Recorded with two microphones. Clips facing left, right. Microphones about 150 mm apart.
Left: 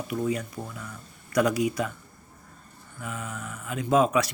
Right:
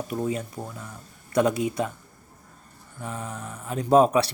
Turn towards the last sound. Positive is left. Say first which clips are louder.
# right 4 dB
turn(degrees=-35)  # may be behind; listen again after turning